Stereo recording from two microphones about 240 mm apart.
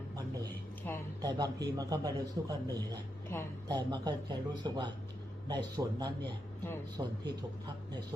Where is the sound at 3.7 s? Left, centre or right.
Centre.